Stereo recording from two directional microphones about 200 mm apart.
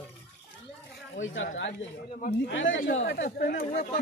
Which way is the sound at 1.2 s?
70° left (ahead or behind).